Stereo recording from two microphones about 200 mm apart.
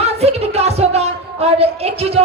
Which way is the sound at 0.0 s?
30° right (ahead or behind).